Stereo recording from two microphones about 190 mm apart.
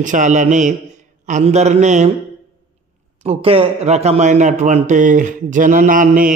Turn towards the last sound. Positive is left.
turn(degrees=-45)  # may be behind; listen again after turning